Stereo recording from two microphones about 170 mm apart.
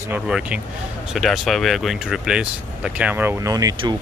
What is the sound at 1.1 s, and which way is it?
Speech, centre (ahead or behind).